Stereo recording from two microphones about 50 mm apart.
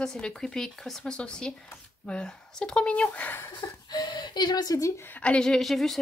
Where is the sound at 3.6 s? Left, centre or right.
Left.